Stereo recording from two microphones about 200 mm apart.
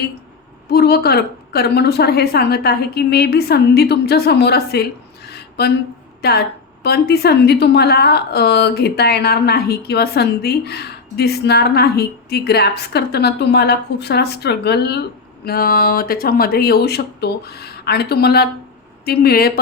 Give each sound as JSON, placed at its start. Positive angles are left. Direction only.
{"t": 0.7, "sound": "a woman's voice", "side_deg": 50}